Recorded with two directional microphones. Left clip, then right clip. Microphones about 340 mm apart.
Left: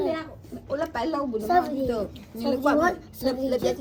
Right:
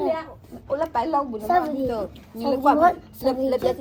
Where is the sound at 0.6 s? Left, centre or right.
Centre.